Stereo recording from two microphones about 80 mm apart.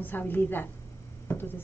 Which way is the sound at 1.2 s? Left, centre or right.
Left.